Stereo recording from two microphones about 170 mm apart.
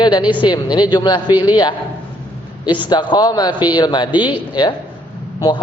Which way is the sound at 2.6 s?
25° left (ahead or behind).